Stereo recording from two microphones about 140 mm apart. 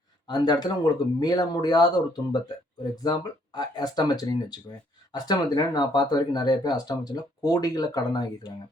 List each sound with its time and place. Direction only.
0.3 s speech: 30° left (ahead or behind)